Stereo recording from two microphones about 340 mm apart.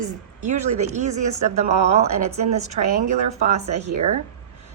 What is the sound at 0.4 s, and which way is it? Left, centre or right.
A woman's voice, right.